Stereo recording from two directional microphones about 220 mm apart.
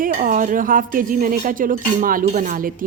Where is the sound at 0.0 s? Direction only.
40° right (ahead or behind).